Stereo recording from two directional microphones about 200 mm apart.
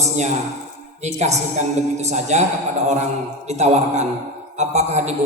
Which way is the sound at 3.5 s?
35° right (ahead or behind).